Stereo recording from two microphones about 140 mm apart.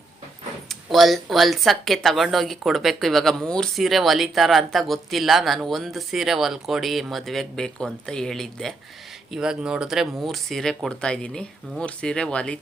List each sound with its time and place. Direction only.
0.7 s speech: centre (ahead or behind)